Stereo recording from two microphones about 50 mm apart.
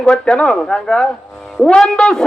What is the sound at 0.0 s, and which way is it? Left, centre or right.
Speech, centre.